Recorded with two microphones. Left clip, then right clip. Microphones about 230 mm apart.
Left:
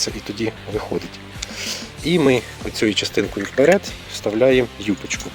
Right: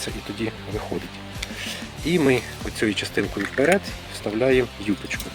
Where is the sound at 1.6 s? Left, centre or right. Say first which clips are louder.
Left 6 dB; left.